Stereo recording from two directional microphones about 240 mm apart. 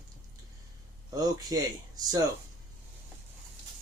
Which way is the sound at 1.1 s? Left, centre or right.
Centre.